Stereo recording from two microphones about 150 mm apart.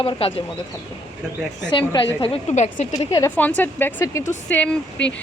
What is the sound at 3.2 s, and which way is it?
A woman's voice, 10° left (ahead or behind).